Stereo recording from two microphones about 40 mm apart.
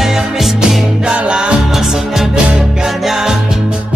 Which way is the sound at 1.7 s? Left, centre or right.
Centre.